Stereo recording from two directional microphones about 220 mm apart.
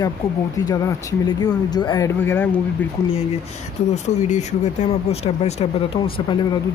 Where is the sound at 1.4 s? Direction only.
20° left (ahead or behind).